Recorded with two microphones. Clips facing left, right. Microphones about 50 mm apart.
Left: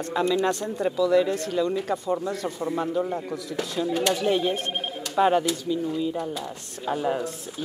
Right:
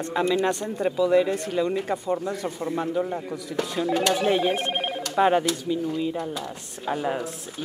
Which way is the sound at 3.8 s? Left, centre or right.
Right.